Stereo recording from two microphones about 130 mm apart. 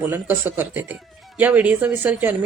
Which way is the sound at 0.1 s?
15° right (ahead or behind).